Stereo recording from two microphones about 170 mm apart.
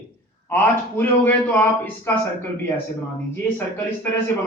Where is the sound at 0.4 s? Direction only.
10° left (ahead or behind).